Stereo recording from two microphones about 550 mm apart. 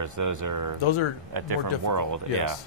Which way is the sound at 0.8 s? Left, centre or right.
Left.